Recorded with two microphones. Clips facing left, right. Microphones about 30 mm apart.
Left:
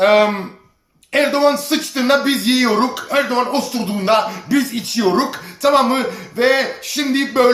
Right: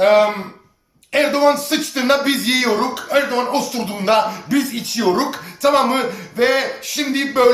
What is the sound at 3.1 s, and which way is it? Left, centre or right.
Speech, left.